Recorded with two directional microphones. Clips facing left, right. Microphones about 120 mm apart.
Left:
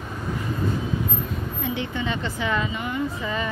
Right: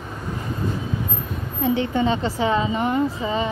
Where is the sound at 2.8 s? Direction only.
40° right (ahead or behind).